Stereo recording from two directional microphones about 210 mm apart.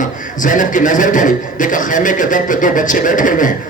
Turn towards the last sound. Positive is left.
turn(degrees=40)  # may be behind; listen again after turning